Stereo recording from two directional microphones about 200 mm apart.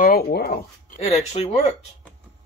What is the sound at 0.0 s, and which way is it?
Speech, 50° left (ahead or behind).